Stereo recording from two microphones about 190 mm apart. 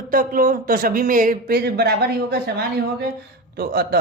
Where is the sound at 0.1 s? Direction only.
50° right (ahead or behind).